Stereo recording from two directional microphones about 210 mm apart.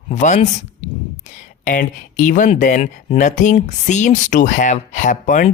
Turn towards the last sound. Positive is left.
turn(degrees=35)  # may be behind; listen again after turning